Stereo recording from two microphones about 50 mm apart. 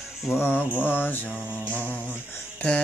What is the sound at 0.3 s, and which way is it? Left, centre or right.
Music, left.